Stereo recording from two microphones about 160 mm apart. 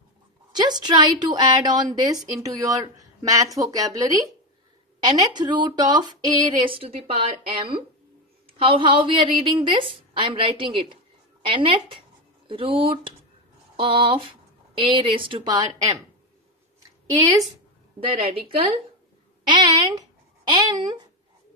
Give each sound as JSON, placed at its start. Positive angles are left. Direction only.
{"t": 0.5, "sound": "a woman's voice", "side_deg": -25}
{"t": 17.2, "sound": "speech", "side_deg": -20}
{"t": 19.4, "sound": "speech", "side_deg": -25}